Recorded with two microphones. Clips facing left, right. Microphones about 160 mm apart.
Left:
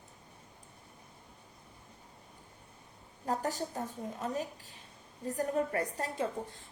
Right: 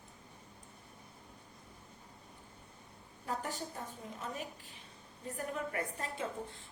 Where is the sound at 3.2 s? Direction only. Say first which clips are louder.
Left 6 dB; 40° left (ahead or behind).